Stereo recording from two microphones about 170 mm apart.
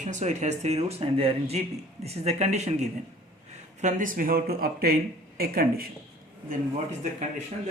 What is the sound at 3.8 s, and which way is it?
Speech, 50° right (ahead or behind).